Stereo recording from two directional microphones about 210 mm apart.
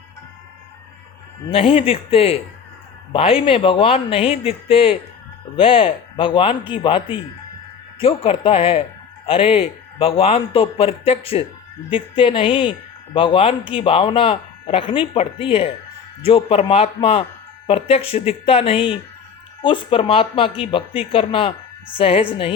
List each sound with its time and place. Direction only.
1.5 s speech: 25° left (ahead or behind)